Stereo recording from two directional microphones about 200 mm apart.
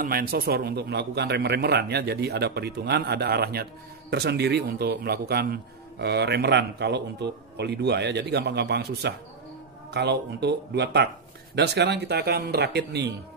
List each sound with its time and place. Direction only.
0.0 s a man's voice: 50° right (ahead or behind)